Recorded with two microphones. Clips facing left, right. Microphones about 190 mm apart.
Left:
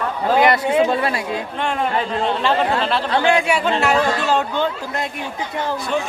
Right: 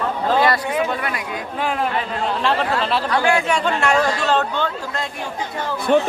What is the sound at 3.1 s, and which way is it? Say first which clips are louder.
Speech: left 2 dB; 20° left (ahead or behind).